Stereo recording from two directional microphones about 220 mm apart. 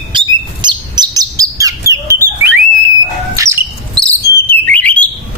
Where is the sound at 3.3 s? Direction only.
10° right (ahead or behind).